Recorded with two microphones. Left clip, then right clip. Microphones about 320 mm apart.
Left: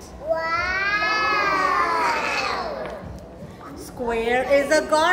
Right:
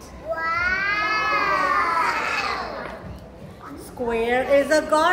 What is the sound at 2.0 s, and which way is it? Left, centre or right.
Baby cry, left.